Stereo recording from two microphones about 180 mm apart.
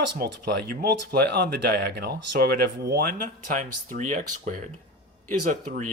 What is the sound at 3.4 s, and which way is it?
Speech, 45° right (ahead or behind).